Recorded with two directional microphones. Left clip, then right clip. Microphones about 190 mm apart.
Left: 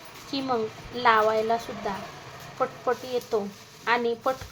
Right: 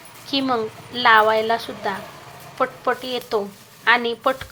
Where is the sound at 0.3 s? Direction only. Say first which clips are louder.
Right 6 dB; 10° right (ahead or behind).